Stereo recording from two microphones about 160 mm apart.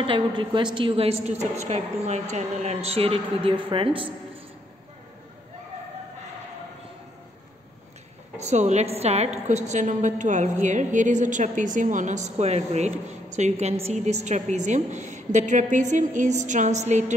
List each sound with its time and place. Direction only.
0.0 s a man's voice: 30° right (ahead or behind)
8.4 s a woman's voice: 45° right (ahead or behind)